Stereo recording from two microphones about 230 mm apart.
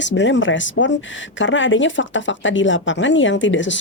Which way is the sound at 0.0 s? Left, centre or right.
Left.